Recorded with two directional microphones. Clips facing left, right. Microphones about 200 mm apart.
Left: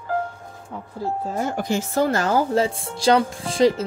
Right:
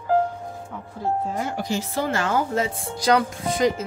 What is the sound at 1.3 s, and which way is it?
A woman's voice, 45° left (ahead or behind).